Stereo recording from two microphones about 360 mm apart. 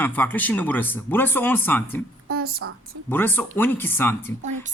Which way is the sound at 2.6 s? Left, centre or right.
Right.